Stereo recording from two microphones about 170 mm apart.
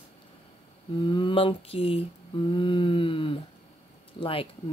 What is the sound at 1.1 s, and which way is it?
Mantra, 30° left (ahead or behind).